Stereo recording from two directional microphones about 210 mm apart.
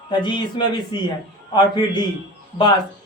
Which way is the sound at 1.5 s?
20° left (ahead or behind).